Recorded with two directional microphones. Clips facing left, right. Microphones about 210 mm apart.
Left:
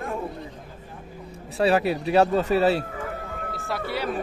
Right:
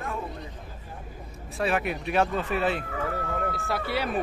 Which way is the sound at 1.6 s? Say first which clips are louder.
Left 6 dB; 35° left (ahead or behind).